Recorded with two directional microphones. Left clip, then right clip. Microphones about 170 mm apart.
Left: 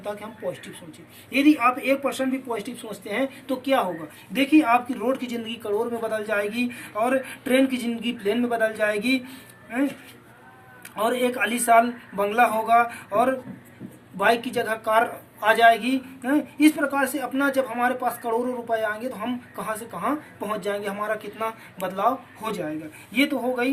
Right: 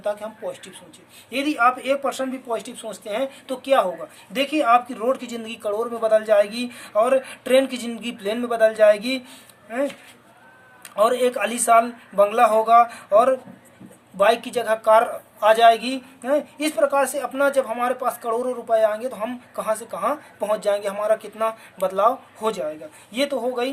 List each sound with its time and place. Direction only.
1.3 s speech: 45° right (ahead or behind)
10.9 s speech: 50° right (ahead or behind)